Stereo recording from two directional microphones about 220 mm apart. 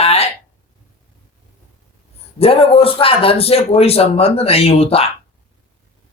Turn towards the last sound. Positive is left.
turn(degrees=25)  # may be behind; listen again after turning